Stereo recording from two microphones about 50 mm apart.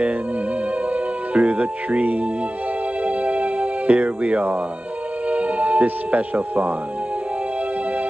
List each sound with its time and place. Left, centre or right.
0.8 s speech: right
3.0 s music: right
5.3 s speech: right